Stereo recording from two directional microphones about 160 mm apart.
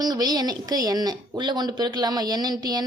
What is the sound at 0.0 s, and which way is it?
Speech, 25° right (ahead or behind).